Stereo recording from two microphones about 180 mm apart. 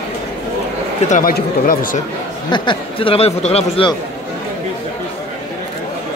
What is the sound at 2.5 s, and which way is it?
Speech, 25° left (ahead or behind).